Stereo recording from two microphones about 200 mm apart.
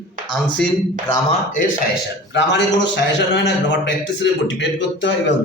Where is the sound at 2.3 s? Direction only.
60° left (ahead or behind).